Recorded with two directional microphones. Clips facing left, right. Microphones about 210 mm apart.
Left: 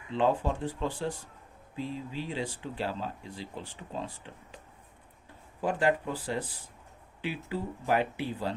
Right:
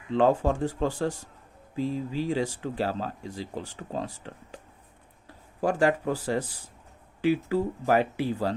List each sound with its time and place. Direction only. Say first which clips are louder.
0.1 s speech: right 5 dB; 45° right (ahead or behind)
5.5 s speech: right 4 dB; 45° right (ahead or behind)